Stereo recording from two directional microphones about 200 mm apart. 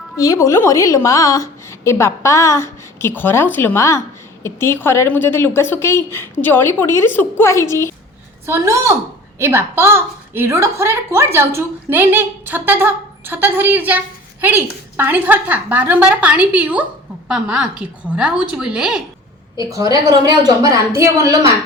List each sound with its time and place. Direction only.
0.2 s a woman's voice: 15° left (ahead or behind)
8.4 s a woman's voice: 15° right (ahead or behind)
19.5 s a woman's voice: 15° right (ahead or behind)